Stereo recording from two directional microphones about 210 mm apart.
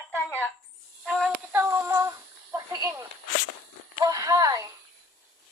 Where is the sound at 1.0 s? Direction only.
Centre (ahead or behind).